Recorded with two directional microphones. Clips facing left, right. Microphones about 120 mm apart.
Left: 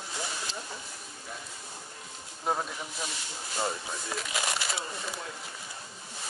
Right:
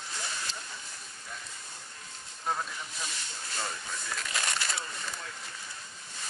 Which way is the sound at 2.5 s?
10° left (ahead or behind).